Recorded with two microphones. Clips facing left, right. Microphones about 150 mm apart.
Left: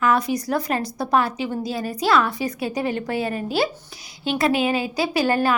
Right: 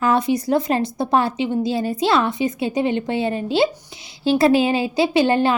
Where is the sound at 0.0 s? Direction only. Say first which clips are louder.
Right 2 dB; 25° right (ahead or behind).